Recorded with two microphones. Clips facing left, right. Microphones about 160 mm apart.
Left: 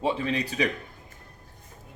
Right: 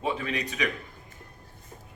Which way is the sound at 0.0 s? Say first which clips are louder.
Left 3 dB; 30° left (ahead or behind).